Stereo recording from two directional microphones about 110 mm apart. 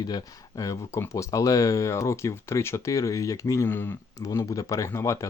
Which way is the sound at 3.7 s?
20° left (ahead or behind).